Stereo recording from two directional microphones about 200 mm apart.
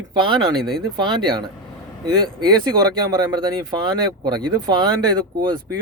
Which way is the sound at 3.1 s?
20° right (ahead or behind).